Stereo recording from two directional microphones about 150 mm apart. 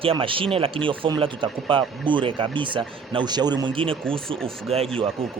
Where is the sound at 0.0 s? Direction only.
35° right (ahead or behind).